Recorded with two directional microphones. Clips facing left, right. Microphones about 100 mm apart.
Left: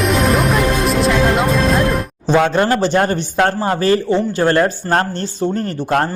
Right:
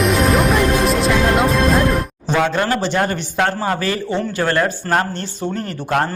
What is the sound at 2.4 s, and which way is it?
A man's voice, 35° left (ahead or behind).